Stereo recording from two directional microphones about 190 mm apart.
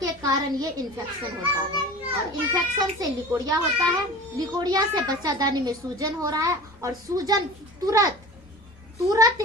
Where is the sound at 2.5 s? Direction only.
20° right (ahead or behind).